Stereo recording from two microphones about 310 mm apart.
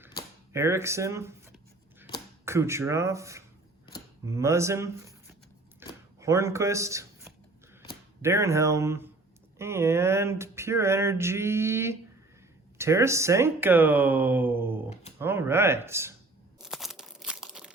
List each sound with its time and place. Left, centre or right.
0.5 s speech: centre
2.4 s speech: centre
5.8 s a sound: centre
6.1 s speech: centre
16.6 s crumpling: centre